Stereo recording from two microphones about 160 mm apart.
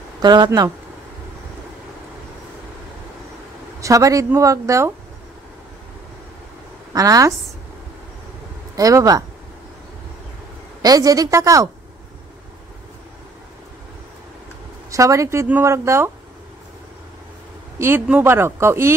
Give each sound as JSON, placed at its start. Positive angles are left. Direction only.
{"t": 0.2, "sound": "speech", "side_deg": -25}
{"t": 3.8, "sound": "speech", "side_deg": -20}
{"t": 6.9, "sound": "speech", "side_deg": -20}
{"t": 8.7, "sound": "speech", "side_deg": -20}
{"t": 10.8, "sound": "speech", "side_deg": -25}
{"t": 14.9, "sound": "speech", "side_deg": -20}
{"t": 17.7, "sound": "speech", "side_deg": -15}